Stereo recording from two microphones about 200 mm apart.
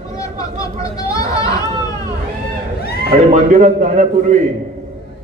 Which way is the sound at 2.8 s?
50° left (ahead or behind).